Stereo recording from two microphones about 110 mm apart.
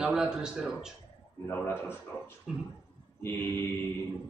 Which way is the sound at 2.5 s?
5° right (ahead or behind).